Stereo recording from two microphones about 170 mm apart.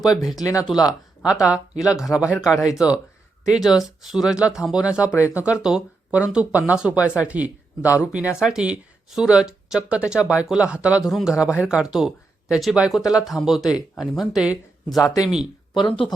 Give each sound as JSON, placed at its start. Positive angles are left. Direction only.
{"t": 0.3, "sound": "speech", "side_deg": 20}
{"t": 1.3, "sound": "speech", "side_deg": -5}
{"t": 14.9, "sound": "speech", "side_deg": 20}
{"t": 15.7, "sound": "speech", "side_deg": 30}